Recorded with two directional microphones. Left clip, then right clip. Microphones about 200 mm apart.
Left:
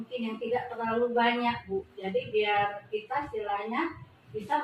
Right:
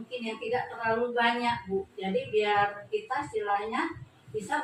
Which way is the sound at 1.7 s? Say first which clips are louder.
Right 2 dB; 15° left (ahead or behind).